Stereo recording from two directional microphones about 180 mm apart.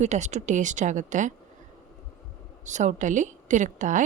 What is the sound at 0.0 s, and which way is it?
A woman's voice, 40° right (ahead or behind).